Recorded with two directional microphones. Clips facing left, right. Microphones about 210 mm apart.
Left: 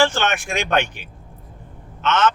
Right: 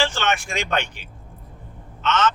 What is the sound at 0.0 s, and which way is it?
A man's voice, 50° left (ahead or behind).